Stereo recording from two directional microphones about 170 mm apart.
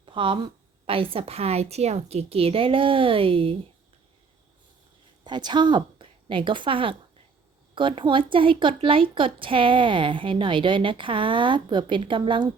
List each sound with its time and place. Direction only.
0.0 s a woman's voice: 30° right (ahead or behind)
5.2 s a woman's voice: 25° right (ahead or behind)